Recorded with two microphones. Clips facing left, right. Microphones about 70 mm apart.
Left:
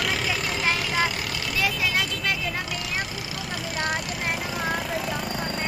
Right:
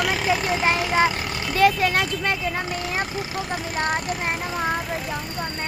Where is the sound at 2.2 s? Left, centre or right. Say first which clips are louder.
Right 3 dB; right.